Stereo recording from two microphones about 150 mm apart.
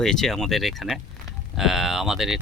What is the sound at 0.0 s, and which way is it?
Speech, 5° left (ahead or behind).